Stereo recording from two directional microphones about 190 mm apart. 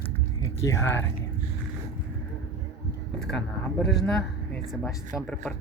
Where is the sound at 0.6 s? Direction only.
15° left (ahead or behind).